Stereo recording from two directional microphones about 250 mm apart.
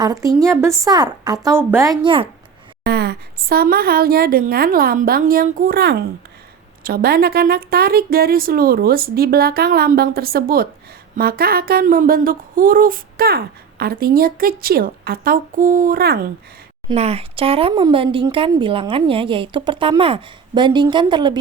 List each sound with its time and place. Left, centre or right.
0.0 s a woman's voice: centre
2.8 s speech: right
16.9 s a woman's voice: right